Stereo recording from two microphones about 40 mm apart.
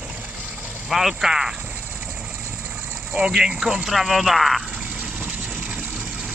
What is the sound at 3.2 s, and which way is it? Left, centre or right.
Speech, right.